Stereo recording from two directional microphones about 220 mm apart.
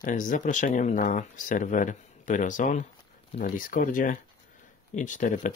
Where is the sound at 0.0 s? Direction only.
35° left (ahead or behind).